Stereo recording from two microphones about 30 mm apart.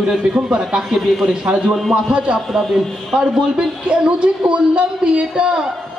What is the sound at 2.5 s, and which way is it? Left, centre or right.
Speech, centre.